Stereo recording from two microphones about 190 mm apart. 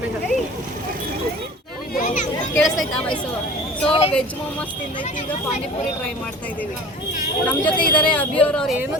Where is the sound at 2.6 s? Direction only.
5° left (ahead or behind).